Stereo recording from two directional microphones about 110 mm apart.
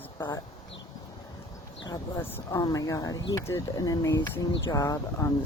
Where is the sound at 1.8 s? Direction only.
35° left (ahead or behind).